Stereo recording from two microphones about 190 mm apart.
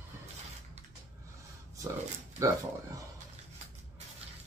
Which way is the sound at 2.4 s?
15° right (ahead or behind).